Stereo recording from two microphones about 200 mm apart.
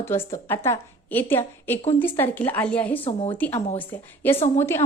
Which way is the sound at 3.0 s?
30° left (ahead or behind).